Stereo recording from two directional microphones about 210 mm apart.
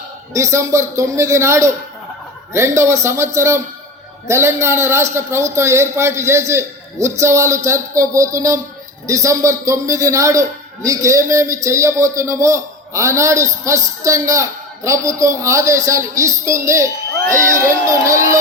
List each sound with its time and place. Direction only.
0.3 s a man's voice: 15° right (ahead or behind)
17.2 s speech: 40° right (ahead or behind)
17.6 s a man's voice: 15° right (ahead or behind)